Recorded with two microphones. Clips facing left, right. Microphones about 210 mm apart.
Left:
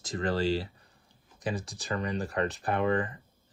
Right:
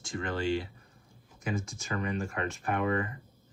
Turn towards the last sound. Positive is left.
turn(degrees=35)  # may be behind; listen again after turning